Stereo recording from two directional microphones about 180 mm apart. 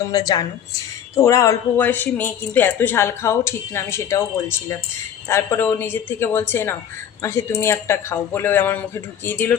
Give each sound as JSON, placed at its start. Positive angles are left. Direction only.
{"t": 0.0, "sound": "a woman's voice", "side_deg": 20}